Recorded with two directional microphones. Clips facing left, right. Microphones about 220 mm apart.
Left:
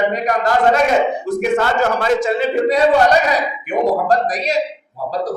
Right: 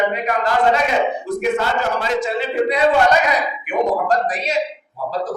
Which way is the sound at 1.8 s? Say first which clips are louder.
Left 4 dB; 45° left (ahead or behind).